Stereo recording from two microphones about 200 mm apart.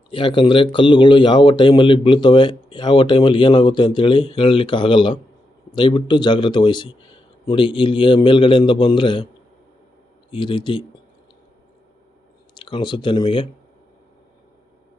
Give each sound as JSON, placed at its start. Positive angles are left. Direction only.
{"t": 0.1, "sound": "speech", "side_deg": 25}
{"t": 10.3, "sound": "speech", "side_deg": 25}
{"t": 12.5, "sound": "speech", "side_deg": 25}